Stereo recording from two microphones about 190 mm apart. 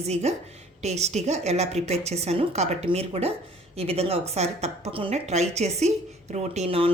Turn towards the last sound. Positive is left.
turn(degrees=-30)  # may be behind; listen again after turning